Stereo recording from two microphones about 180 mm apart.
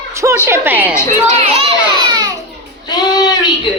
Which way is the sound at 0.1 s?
15° right (ahead or behind).